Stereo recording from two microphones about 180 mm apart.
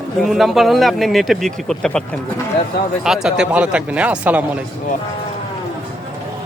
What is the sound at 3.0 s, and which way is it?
Speech, 5° right (ahead or behind).